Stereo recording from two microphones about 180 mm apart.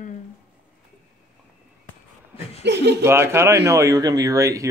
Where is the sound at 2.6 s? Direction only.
70° right (ahead or behind).